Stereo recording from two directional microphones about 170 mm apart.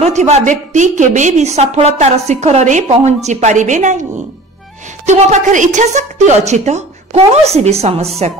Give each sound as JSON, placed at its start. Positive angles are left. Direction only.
{"t": 0.0, "sound": "a woman's voice", "side_deg": -40}
{"t": 5.0, "sound": "a woman's voice", "side_deg": -40}